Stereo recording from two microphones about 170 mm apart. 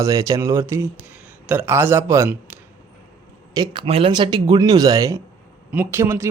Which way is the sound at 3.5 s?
25° right (ahead or behind).